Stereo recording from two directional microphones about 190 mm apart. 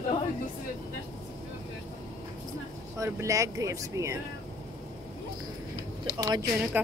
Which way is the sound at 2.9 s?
15° right (ahead or behind).